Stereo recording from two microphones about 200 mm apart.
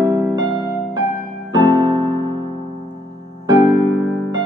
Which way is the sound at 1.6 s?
20° right (ahead or behind).